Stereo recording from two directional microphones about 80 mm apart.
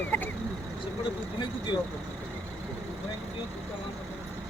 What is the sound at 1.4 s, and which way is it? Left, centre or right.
Speech, left.